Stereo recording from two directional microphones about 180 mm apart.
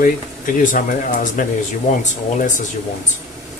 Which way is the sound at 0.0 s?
50° left (ahead or behind).